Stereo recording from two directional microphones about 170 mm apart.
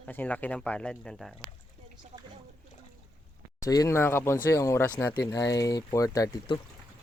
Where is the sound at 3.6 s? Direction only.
20° left (ahead or behind).